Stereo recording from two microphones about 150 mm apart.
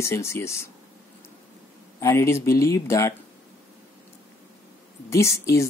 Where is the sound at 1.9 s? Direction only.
20° left (ahead or behind).